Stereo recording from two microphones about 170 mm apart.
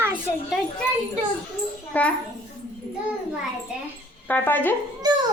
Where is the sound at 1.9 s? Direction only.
10° left (ahead or behind).